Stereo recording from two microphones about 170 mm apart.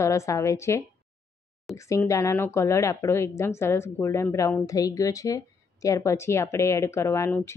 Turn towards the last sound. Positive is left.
turn(degrees=15)  # may be behind; listen again after turning